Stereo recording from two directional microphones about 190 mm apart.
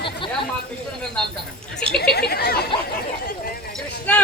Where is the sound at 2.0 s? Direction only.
55° left (ahead or behind).